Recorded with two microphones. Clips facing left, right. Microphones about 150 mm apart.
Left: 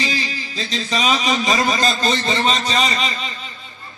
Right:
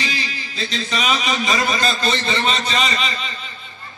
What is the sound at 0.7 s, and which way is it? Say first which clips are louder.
A man's voice: left 2 dB; 35° left (ahead or behind).